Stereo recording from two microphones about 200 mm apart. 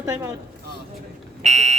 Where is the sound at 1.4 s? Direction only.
35° right (ahead or behind).